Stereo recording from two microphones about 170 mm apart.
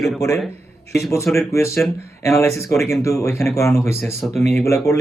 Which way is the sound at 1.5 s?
15° left (ahead or behind).